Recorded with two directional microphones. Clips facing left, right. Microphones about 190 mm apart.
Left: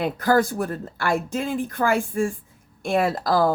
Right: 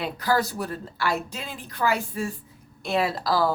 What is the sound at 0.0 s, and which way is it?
Speech, 50° left (ahead or behind).